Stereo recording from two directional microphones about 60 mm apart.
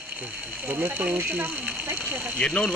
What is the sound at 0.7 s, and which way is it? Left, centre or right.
Speech, right.